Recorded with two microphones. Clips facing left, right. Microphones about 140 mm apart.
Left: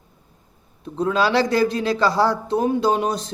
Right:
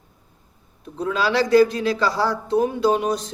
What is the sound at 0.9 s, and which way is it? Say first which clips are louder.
Speech: left 2 dB; 30° left (ahead or behind).